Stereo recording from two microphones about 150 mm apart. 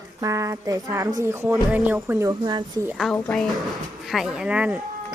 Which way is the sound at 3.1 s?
Centre (ahead or behind).